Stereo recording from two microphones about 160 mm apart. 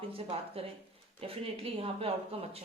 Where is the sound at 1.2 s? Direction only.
35° right (ahead or behind).